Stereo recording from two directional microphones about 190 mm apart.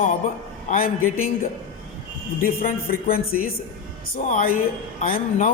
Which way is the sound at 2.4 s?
45° left (ahead or behind).